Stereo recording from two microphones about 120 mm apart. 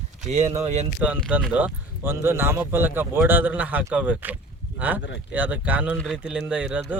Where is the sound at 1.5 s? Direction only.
15° right (ahead or behind).